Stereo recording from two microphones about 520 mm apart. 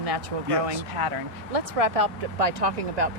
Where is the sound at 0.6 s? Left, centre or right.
Right.